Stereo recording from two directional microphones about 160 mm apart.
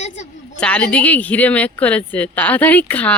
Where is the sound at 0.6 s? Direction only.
10° left (ahead or behind).